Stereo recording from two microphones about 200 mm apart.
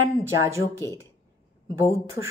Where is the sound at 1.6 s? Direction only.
15° right (ahead or behind).